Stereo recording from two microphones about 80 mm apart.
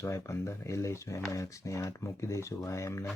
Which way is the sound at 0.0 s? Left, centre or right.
Left.